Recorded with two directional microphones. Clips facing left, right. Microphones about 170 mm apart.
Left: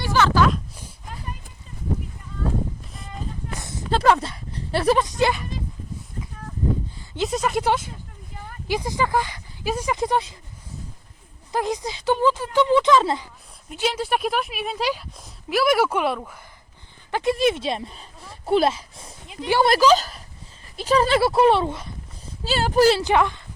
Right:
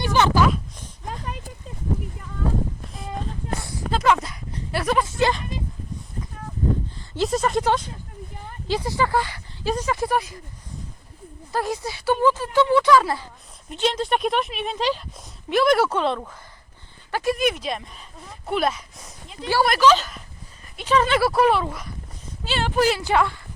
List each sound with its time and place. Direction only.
0.0 s a sound: 20° right (ahead or behind)
3.6 s a sound: 20° left (ahead or behind)
3.9 s dog: 35° left (ahead or behind)
5.0 s speech: 15° left (ahead or behind)
7.2 s speech: centre (ahead or behind)
8.6 s speech: 15° left (ahead or behind)
11.5 s speech: 15° left (ahead or behind)
13.7 s speech: 10° left (ahead or behind)
17.1 s speech: 20° left (ahead or behind)
22.4 s speech: 40° left (ahead or behind)
23.0 s speech: 20° left (ahead or behind)